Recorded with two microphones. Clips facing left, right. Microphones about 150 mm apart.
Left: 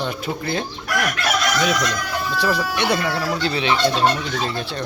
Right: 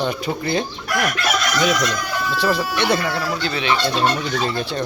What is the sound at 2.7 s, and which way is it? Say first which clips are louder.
Speech: right 1 dB; 15° left (ahead or behind).